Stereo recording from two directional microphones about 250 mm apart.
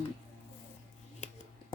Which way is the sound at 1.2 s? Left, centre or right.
Left.